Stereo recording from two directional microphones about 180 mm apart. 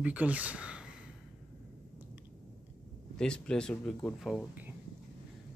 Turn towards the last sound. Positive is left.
turn(degrees=0)  # may be behind; listen again after turning